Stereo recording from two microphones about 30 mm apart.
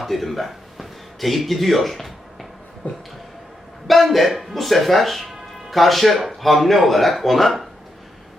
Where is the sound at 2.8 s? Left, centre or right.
Left.